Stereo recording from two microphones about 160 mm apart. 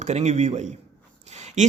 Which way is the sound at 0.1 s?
45° right (ahead or behind).